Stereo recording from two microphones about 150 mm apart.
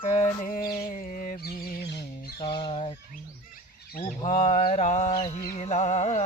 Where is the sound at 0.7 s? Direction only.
65° left (ahead or behind).